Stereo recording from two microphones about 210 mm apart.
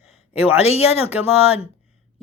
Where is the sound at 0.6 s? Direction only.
30° left (ahead or behind).